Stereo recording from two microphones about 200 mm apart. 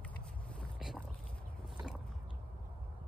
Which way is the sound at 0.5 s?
Centre (ahead or behind).